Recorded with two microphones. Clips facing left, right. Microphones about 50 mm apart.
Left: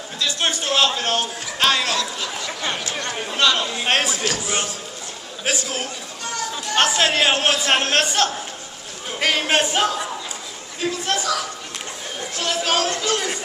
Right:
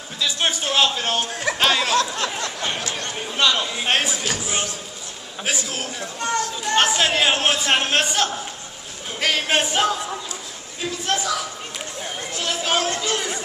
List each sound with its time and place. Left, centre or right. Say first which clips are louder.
0.2 s a man's voice: even; centre
2.0 s a sound: right 4 dB; right
3.3 s a man's voice: left 1 dB; centre